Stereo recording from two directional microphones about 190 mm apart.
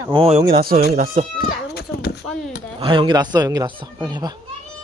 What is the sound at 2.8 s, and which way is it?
Speech, 25° right (ahead or behind).